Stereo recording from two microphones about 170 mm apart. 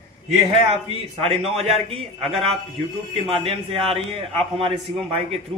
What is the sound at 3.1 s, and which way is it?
A man's voice, 35° right (ahead or behind).